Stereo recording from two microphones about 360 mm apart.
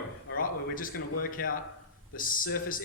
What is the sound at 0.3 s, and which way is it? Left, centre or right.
Speech, left.